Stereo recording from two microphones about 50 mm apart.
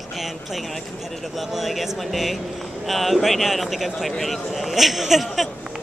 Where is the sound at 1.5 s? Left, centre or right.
Centre.